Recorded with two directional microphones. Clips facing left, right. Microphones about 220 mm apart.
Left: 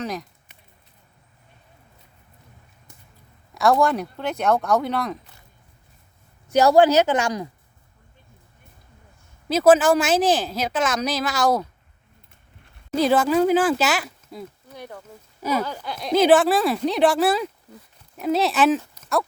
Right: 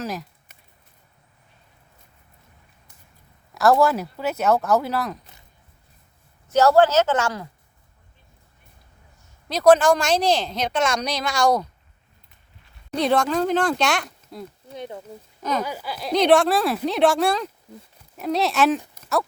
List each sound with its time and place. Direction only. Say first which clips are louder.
0.0 s a woman's voice: left 1 dB; centre (ahead or behind)
3.5 s a woman's voice: right 1 dB; centre (ahead or behind)
6.5 s speech: left 1 dB; 15° left (ahead or behind)
9.5 s a woman's voice: even; 5° left (ahead or behind)
12.9 s a woman's voice: left 2 dB; 5° left (ahead or behind)
14.7 s speech: right 4 dB; 20° right (ahead or behind)
15.4 s speech: left 2 dB; 10° left (ahead or behind)
15.6 s a woman's voice: even; 5° right (ahead or behind)